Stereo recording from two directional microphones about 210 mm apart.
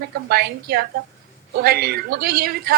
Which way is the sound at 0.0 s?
50° right (ahead or behind).